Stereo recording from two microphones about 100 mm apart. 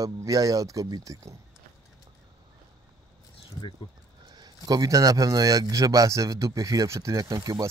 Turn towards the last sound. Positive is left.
turn(degrees=-35)  # may be behind; listen again after turning